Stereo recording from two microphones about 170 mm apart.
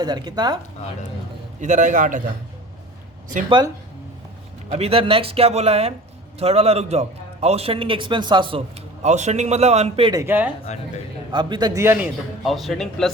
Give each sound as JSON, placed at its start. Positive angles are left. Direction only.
{"t": 0.0, "sound": "speech", "side_deg": -25}
{"t": 1.6, "sound": "a man's voice", "side_deg": -45}
{"t": 4.7, "sound": "a man's voice", "side_deg": -35}
{"t": 10.2, "sound": "a man's voice", "side_deg": -10}
{"t": 11.3, "sound": "a man's voice", "side_deg": -25}